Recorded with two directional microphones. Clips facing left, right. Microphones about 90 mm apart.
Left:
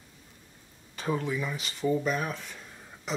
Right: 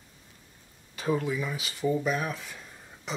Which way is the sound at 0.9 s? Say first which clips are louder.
Right 2 dB; centre (ahead or behind).